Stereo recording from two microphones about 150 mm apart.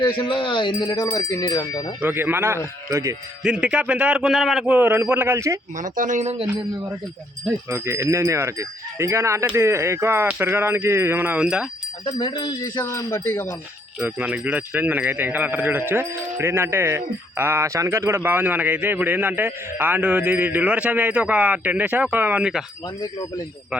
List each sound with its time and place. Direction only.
0.0 s speech: 30° left (ahead or behind)
2.0 s speech: 15° right (ahead or behind)
3.4 s speech: 5° right (ahead or behind)
5.7 s speech: 60° right (ahead or behind)
7.7 s speech: 20° right (ahead or behind)
12.1 s speech: 30° left (ahead or behind)
12.8 s speech: 20° left (ahead or behind)
14.0 s speech: 10° right (ahead or behind)